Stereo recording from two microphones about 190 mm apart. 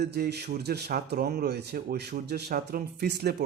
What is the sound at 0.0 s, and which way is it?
Speech, 60° right (ahead or behind).